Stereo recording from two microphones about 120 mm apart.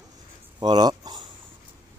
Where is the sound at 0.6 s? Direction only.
35° right (ahead or behind).